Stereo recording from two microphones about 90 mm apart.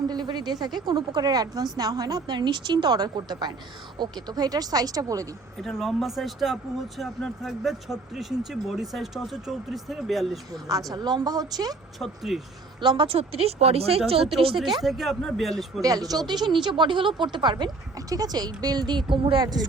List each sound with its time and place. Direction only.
0.1 s a woman's voice: 50° right (ahead or behind)
5.5 s speech: centre (ahead or behind)
10.9 s a woman's voice: 50° right (ahead or behind)
11.9 s speech: centre (ahead or behind)
12.8 s speech: 60° right (ahead or behind); by 14.0 s 90° right
14.8 s speech: centre (ahead or behind)
15.8 s a woman's voice: 40° right (ahead or behind); by 19.5 s 70° right (ahead or behind)